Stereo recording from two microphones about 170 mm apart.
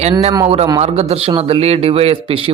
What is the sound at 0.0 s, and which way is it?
Speech, 35° right (ahead or behind).